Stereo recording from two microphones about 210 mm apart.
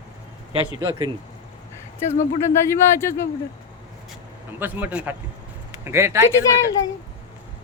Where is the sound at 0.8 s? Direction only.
20° right (ahead or behind).